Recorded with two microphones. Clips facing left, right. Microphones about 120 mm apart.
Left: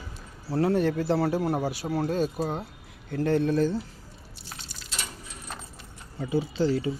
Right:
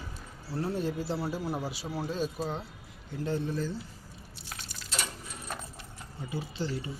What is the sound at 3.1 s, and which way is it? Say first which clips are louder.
Speech: left 8 dB; 65° left (ahead or behind).